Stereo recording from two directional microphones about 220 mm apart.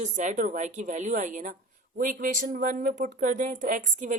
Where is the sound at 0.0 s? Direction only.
35° right (ahead or behind).